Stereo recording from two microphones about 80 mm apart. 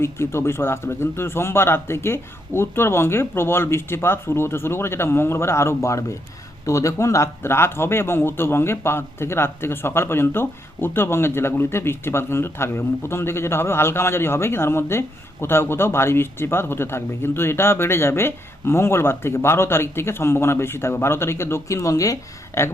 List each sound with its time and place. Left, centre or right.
0.0 s speech: left